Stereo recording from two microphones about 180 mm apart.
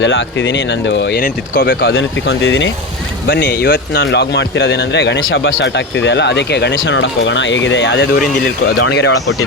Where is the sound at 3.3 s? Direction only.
65° left (ahead or behind); by 8.0 s 85° left.